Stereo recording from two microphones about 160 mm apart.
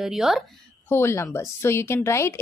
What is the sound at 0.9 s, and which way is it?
Speech, 15° left (ahead or behind).